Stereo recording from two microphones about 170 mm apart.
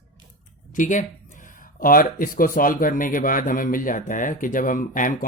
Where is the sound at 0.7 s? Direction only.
50° left (ahead or behind).